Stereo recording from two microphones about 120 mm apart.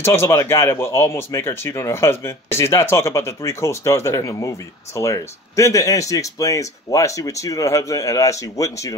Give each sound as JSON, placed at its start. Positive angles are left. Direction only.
{"t": 0.0, "sound": "speech", "side_deg": 20}